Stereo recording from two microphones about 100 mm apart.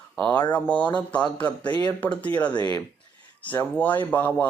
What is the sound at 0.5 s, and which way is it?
Speech, 15° left (ahead or behind).